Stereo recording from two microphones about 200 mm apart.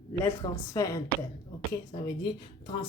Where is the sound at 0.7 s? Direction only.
15° left (ahead or behind).